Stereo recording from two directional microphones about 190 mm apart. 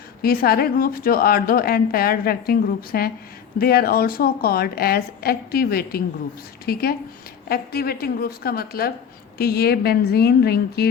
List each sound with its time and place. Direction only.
0.2 s a woman's voice: 55° left (ahead or behind)